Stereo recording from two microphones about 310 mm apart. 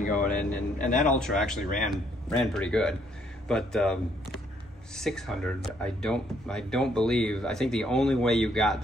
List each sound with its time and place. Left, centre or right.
0.3 s speech: centre
0.7 s a man's voice: left
1.0 s speech: centre